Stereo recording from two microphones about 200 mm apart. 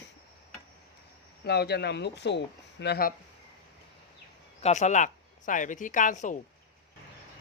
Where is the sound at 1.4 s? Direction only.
55° left (ahead or behind).